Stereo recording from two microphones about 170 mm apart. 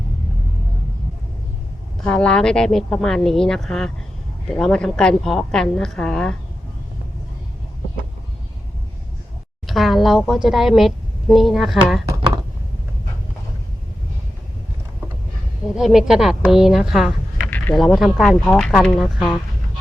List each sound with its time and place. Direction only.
2.0 s speech: 5° left (ahead or behind)
9.6 s a woman's voice: centre (ahead or behind)
15.7 s speech: centre (ahead or behind)